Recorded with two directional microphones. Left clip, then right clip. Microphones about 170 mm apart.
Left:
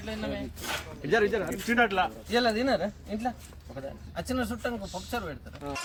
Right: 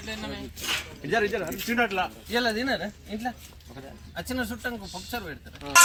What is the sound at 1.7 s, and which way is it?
Speech, 20° right (ahead or behind).